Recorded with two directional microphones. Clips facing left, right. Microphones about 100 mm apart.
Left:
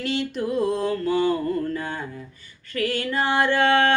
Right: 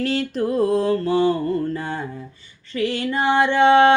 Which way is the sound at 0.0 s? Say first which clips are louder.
Right 4 dB; 40° right (ahead or behind).